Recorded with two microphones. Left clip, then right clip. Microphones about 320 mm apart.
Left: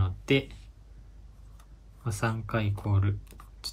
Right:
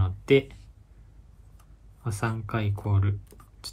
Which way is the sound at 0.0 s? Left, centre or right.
Centre.